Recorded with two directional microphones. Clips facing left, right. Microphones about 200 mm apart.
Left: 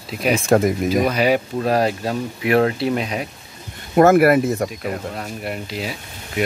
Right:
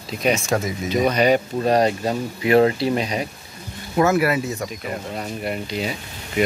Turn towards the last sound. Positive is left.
turn(degrees=0)  # may be behind; listen again after turning